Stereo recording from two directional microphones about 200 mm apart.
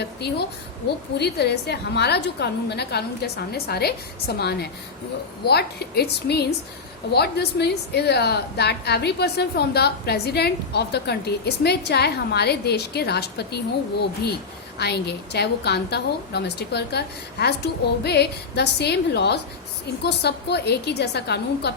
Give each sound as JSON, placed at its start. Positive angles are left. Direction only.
{"t": 0.0, "sound": "a woman's voice", "side_deg": 55}
{"t": 5.5, "sound": "a woman's voice", "side_deg": 55}
{"t": 14.8, "sound": "a woman's voice", "side_deg": 55}